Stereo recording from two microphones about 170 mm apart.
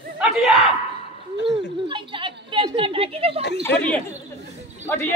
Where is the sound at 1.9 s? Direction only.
30° right (ahead or behind).